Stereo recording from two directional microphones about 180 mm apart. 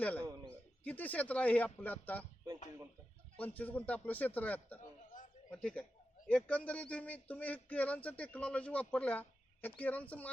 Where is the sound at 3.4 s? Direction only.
10° left (ahead or behind).